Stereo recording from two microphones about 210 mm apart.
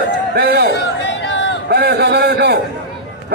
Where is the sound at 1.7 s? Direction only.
50° right (ahead or behind).